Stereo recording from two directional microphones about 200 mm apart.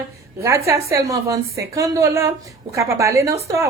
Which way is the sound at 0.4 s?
15° right (ahead or behind).